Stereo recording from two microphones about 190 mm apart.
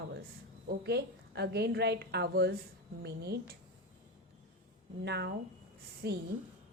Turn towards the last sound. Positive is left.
turn(degrees=-60)  # may be behind; listen again after turning